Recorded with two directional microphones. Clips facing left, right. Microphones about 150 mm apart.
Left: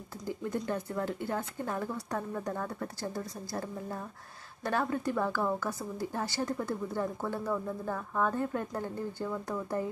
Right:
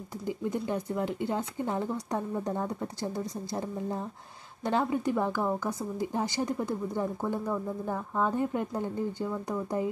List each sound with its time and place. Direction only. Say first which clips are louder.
0.3 s speech: right 2 dB; 15° right (ahead or behind)